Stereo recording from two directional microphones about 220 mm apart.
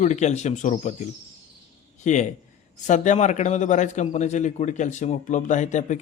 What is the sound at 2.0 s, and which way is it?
Speech, 35° left (ahead or behind).